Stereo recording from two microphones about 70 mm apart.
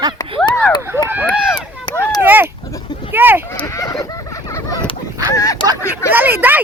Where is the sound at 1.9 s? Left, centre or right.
Left.